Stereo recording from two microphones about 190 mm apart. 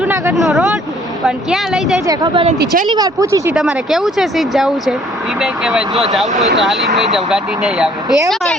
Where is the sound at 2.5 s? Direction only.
55° right (ahead or behind).